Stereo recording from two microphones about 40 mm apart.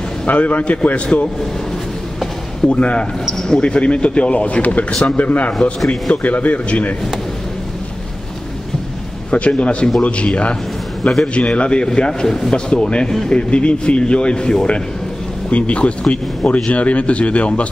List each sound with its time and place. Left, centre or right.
0.3 s a man's voice: left
2.7 s a man's voice: left
5.5 s a man's voice: centre
6.2 s a man's voice: left
9.3 s a man's voice: left
15.5 s a man's voice: left